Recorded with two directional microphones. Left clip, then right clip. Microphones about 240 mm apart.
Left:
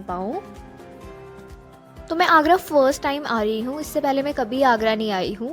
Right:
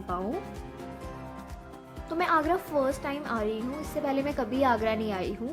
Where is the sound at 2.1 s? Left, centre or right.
Left.